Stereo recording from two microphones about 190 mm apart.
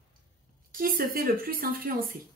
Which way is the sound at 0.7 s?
50° right (ahead or behind).